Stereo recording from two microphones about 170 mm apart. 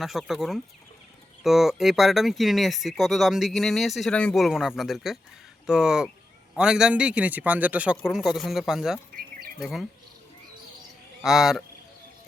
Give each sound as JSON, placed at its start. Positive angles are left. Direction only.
{"t": 0.0, "sound": "speech", "side_deg": 0}
{"t": 11.2, "sound": "speech", "side_deg": 0}